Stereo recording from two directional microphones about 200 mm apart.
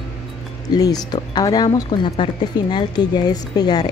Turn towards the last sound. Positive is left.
turn(degrees=20)  # may be behind; listen again after turning